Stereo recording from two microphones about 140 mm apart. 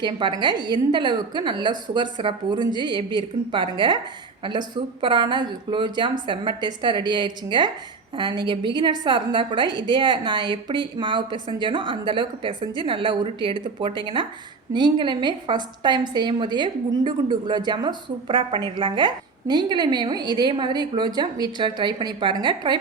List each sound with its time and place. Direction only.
0.0 s a woman's voice: 35° right (ahead or behind)